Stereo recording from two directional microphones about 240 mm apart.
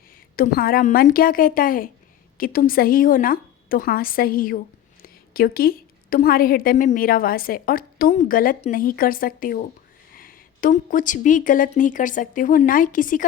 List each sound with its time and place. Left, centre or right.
0.3 s a woman's voice: left